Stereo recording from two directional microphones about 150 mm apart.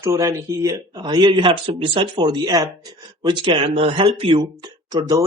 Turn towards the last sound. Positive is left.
turn(degrees=-30)  # may be behind; listen again after turning